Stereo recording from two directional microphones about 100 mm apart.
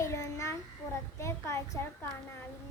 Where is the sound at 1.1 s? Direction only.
30° left (ahead or behind).